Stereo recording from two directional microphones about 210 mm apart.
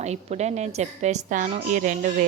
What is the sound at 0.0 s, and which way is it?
A woman's voice, 30° right (ahead or behind).